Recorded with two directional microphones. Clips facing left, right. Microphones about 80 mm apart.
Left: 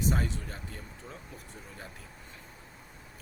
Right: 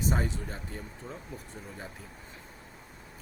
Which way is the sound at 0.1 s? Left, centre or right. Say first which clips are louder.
Right 1 dB; centre.